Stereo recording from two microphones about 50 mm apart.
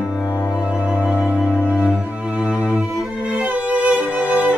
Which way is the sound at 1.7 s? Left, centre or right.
Left.